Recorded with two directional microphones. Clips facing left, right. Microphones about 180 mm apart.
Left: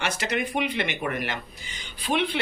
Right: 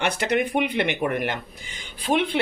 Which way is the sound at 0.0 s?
60° right (ahead or behind).